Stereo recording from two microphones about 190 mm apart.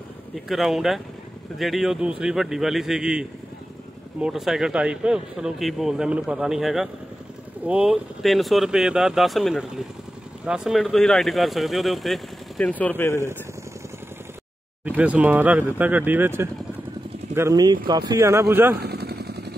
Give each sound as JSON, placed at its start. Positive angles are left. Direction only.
{"t": 0.5, "sound": "speech", "side_deg": 0}
{"t": 14.9, "sound": "speech", "side_deg": -10}
{"t": 18.8, "sound": "vehicle", "side_deg": -55}